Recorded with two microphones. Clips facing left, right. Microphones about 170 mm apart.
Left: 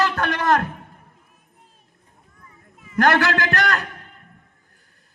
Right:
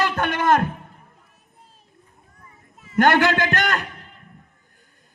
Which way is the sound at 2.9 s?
20° right (ahead or behind).